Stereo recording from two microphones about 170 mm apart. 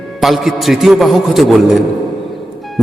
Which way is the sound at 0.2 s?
Centre (ahead or behind).